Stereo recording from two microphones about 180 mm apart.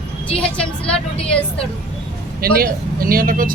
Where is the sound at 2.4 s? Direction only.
55° right (ahead or behind).